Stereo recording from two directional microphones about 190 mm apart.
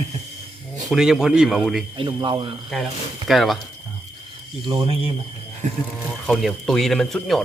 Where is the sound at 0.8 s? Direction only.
Centre (ahead or behind).